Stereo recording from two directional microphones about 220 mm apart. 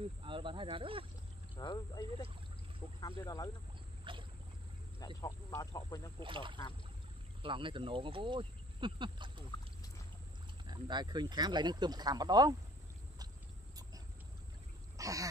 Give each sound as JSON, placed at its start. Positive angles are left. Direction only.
{"t": 0.0, "sound": "speech", "side_deg": -25}
{"t": 1.6, "sound": "speech", "side_deg": 20}
{"t": 4.0, "sound": "boat", "side_deg": -20}
{"t": 5.0, "sound": "speech", "side_deg": 15}
{"t": 6.1, "sound": "speech", "side_deg": -20}
{"t": 10.6, "sound": "speech", "side_deg": -20}
{"t": 15.0, "sound": "throat clearing", "side_deg": -15}